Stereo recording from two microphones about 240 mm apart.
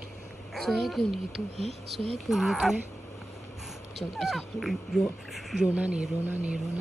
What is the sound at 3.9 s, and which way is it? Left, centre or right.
Speech, centre.